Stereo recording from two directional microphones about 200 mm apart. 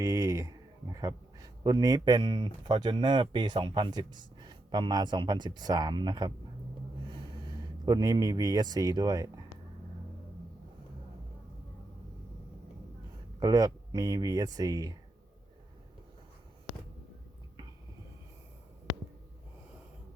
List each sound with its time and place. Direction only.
0.0 s speech: 15° right (ahead or behind)
13.4 s speech: 20° right (ahead or behind)